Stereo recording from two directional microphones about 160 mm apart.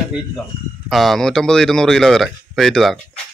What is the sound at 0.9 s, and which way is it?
A man's voice, centre (ahead or behind).